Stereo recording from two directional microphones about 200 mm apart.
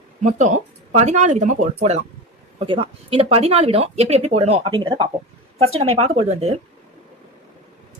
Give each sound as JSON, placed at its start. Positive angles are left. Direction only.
{"t": 0.2, "sound": "speech", "side_deg": -35}